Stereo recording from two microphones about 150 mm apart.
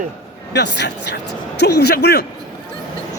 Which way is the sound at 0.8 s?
90° left.